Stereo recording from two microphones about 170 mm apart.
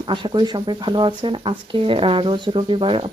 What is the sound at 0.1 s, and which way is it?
Speech, 25° right (ahead or behind).